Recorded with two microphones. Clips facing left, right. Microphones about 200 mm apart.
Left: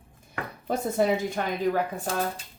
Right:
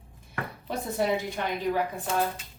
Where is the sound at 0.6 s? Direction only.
45° left (ahead or behind).